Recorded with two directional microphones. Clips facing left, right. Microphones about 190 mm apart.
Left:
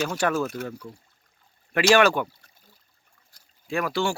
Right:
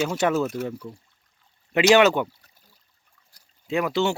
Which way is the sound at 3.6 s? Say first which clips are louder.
Right 3 dB; 20° right (ahead or behind).